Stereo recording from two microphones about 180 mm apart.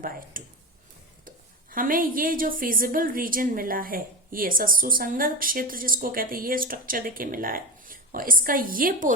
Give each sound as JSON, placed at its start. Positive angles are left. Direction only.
{"t": 0.0, "sound": "a woman's voice", "side_deg": -50}
{"t": 1.7, "sound": "a woman's voice", "side_deg": -50}